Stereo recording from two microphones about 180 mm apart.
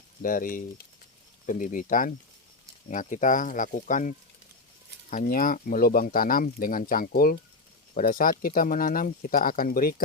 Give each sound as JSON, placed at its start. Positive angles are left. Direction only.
{"t": 0.2, "sound": "speech", "side_deg": 50}
{"t": 5.1, "sound": "speech", "side_deg": 50}